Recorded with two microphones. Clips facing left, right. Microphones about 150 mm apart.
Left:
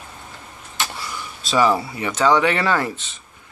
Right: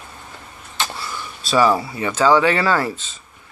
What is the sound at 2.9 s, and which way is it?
Speech, 70° left (ahead or behind).